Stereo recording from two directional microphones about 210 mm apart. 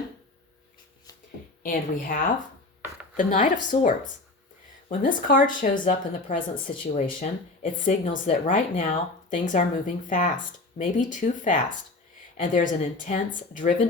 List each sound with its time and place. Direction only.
1.6 s speech: 40° left (ahead or behind)